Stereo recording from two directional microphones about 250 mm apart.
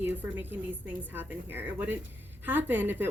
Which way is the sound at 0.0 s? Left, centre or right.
Centre.